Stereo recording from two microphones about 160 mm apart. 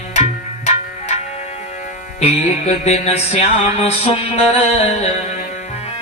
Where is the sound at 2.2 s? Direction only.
45° left (ahead or behind).